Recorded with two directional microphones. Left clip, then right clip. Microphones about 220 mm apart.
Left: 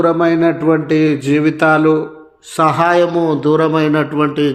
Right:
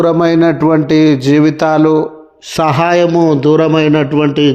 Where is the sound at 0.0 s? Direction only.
35° right (ahead or behind).